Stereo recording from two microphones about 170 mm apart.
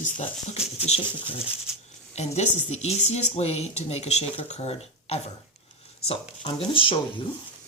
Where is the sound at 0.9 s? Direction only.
35° left (ahead or behind).